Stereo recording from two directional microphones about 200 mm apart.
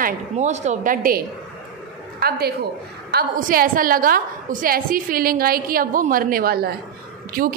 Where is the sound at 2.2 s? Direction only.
50° right (ahead or behind).